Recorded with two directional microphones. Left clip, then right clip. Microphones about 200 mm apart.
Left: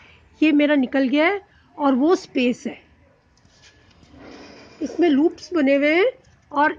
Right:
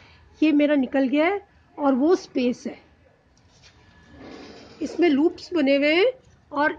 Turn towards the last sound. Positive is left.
turn(degrees=35)  # may be behind; listen again after turning